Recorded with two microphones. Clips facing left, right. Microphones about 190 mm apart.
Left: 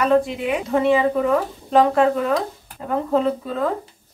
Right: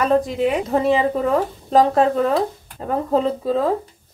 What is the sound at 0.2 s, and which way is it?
Speech, 40° right (ahead or behind).